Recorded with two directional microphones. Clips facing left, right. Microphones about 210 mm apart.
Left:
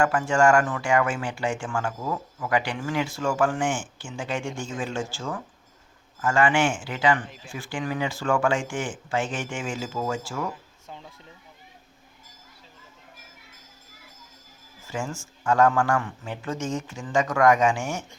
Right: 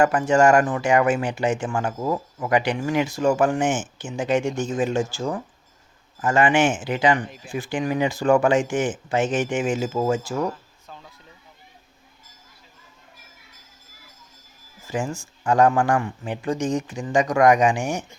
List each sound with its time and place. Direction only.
0.0 s speech: 20° right (ahead or behind)
14.8 s speech: 15° right (ahead or behind)